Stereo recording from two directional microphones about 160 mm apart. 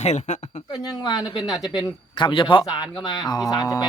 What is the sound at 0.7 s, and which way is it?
Speech, 25° left (ahead or behind).